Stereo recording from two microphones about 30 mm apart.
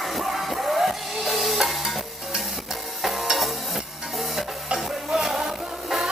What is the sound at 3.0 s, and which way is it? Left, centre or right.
Stir, centre.